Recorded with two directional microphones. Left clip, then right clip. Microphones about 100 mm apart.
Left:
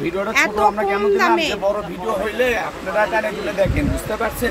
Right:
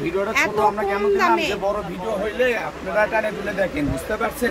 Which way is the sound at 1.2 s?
55° left (ahead or behind).